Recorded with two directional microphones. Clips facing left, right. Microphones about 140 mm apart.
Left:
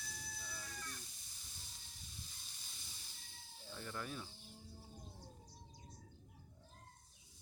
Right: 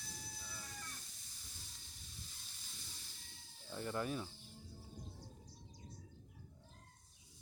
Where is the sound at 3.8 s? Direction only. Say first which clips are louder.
Right 7 dB; 20° right (ahead or behind).